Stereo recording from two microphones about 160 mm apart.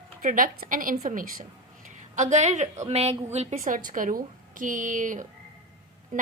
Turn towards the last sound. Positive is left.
turn(degrees=-55)  # may be behind; listen again after turning